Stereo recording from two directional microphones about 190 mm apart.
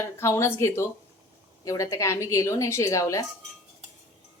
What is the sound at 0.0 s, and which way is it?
Speech, 15° left (ahead or behind).